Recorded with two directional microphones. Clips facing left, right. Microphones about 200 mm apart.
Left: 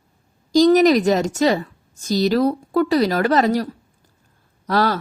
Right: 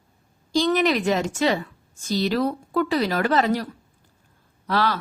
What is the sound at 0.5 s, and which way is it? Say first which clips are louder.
A woman's voice: left 8 dB; 40° left (ahead or behind).